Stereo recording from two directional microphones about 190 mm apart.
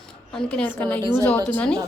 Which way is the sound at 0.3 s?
5° left (ahead or behind).